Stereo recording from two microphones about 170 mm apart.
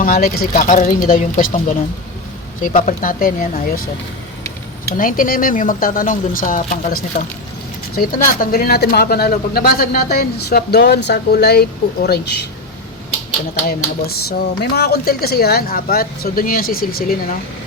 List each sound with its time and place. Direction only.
0.0 s speech: 60° left (ahead or behind)
4.9 s speech: 55° left (ahead or behind); by 12.4 s 70° left (ahead or behind)
13.7 s speech: 70° left (ahead or behind)